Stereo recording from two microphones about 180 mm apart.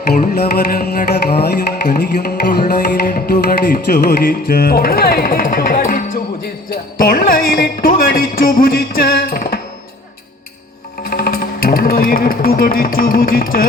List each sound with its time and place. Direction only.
0.1 s music: 60° left (ahead or behind)
7.0 s speech: 55° left (ahead or behind)
11.0 s speech: 55° left (ahead or behind)